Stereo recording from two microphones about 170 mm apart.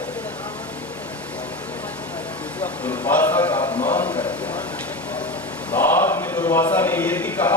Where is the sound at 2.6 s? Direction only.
10° left (ahead or behind).